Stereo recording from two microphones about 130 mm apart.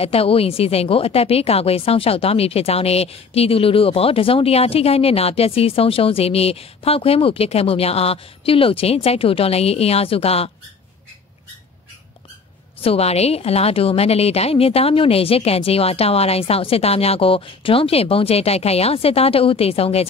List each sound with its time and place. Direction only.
0.0 s a woman's voice: 50° left (ahead or behind)
12.8 s a woman's voice: 50° left (ahead or behind)